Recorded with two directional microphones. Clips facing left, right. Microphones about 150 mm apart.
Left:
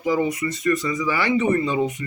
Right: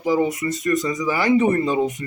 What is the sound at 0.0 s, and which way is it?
Speech, 35° right (ahead or behind).